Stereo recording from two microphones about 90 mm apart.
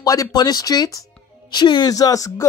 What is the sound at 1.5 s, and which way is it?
Speech, 60° left (ahead or behind).